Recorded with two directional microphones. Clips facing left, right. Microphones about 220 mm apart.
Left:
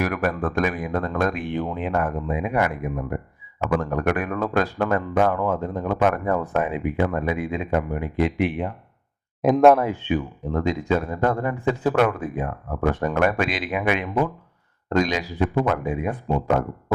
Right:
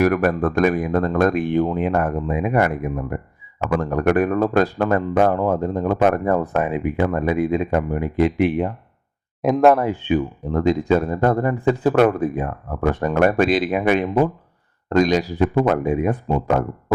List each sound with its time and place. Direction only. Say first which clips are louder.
0.0 s speech: right 6 dB; 45° right (ahead or behind)
9.4 s speech: even; centre (ahead or behind)
10.1 s speech: right 4 dB; 35° right (ahead or behind)